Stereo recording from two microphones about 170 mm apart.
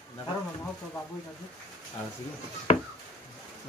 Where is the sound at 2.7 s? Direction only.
35° left (ahead or behind).